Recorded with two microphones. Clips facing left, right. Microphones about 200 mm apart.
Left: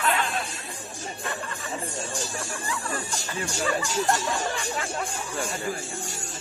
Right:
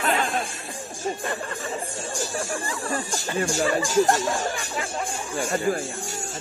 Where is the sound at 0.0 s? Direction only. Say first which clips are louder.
Right 2 dB; 40° right (ahead or behind).